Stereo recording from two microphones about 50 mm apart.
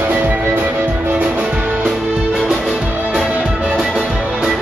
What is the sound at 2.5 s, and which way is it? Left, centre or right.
Music, centre.